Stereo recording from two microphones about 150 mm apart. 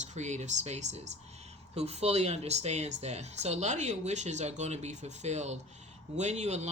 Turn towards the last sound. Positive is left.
turn(degrees=-50)  # may be behind; listen again after turning